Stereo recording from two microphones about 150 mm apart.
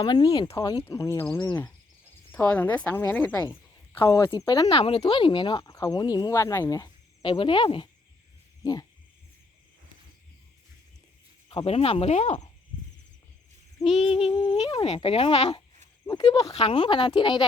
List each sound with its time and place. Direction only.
0.0 s speech: 25° left (ahead or behind)
4.7 s speech: 40° left (ahead or behind); by 6.8 s 20° left (ahead or behind)
7.2 s speech: 35° left (ahead or behind)
8.6 s a sound: 25° left (ahead or behind)
11.4 s speech: 40° left (ahead or behind)
14.0 s speech: 40° left (ahead or behind)
16.0 s speech: 25° left (ahead or behind)
16.4 s speech: 40° left (ahead or behind)